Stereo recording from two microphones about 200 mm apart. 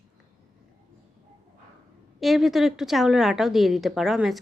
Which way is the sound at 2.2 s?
Centre (ahead or behind).